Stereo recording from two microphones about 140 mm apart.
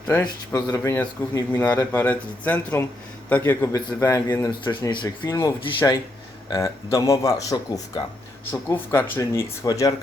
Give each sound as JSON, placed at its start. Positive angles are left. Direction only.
{"t": 0.1, "sound": "speech", "side_deg": 25}
{"t": 6.5, "sound": "speech", "side_deg": 25}
{"t": 8.7, "sound": "speech", "side_deg": 15}